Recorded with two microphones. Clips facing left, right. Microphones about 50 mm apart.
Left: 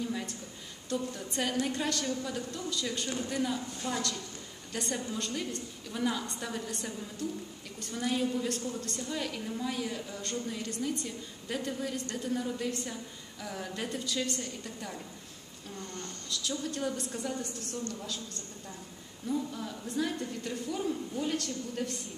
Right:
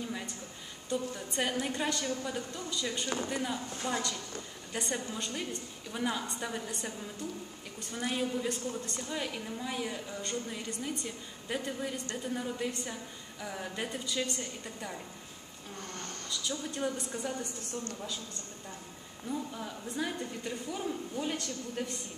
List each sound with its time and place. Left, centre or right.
0.8 s a woman's voice: centre
15.8 s speech: right
16.3 s a woman's voice: centre
19.2 s a woman's voice: centre